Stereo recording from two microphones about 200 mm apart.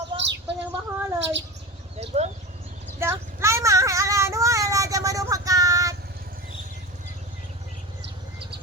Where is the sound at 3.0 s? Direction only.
15° right (ahead or behind).